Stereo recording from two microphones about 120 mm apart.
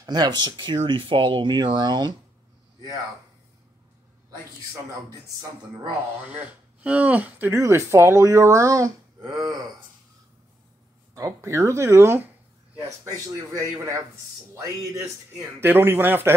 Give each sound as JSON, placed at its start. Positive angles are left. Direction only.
{"t": 0.0, "sound": "speech", "side_deg": -35}
{"t": 6.8, "sound": "speech", "side_deg": -10}
{"t": 11.1, "sound": "speech", "side_deg": -25}
{"t": 13.5, "sound": "speech", "side_deg": -25}